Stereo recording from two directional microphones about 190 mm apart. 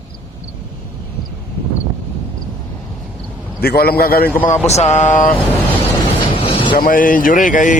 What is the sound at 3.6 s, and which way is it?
Speech, 55° left (ahead or behind).